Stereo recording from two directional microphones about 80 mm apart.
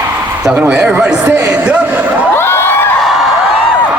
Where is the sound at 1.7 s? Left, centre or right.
Centre.